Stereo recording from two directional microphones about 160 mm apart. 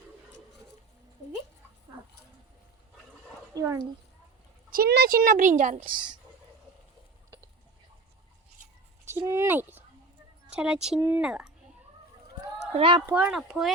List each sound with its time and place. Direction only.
3.5 s speech: 20° right (ahead or behind)
4.7 s speech: 75° right (ahead or behind); by 5.8 s 50° right (ahead or behind)
9.0 s a sound: 15° right (ahead or behind)
10.5 s speech: 5° right (ahead or behind)
12.7 s speech: 30° right (ahead or behind)
13.1 s speech: 10° right (ahead or behind)